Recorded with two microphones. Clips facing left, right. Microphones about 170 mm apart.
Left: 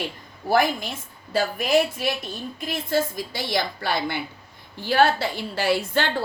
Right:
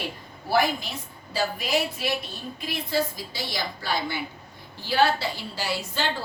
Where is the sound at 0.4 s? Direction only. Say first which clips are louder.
Left 3 dB; 50° left (ahead or behind).